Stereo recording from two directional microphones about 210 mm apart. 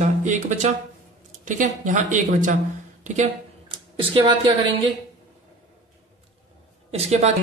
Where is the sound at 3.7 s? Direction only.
25° right (ahead or behind).